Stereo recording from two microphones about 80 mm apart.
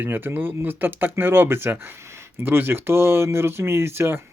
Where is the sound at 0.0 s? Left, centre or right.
Right.